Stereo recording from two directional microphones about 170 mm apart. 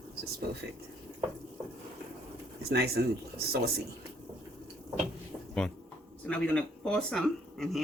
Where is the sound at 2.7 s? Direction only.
70° right (ahead or behind).